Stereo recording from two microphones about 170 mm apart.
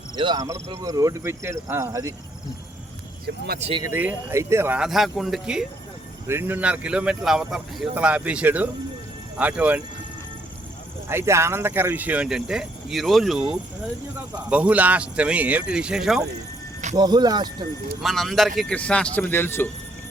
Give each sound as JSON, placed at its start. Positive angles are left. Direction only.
{"t": 0.2, "sound": "speech", "side_deg": -25}
{"t": 3.2, "sound": "speech", "side_deg": -70}
{"t": 3.9, "sound": "speech", "side_deg": -10}
{"t": 6.2, "sound": "speech", "side_deg": -15}
{"t": 11.1, "sound": "speech", "side_deg": -15}
{"t": 14.5, "sound": "speech", "side_deg": -10}
{"t": 16.9, "sound": "speech", "side_deg": -25}
{"t": 18.0, "sound": "speech", "side_deg": 0}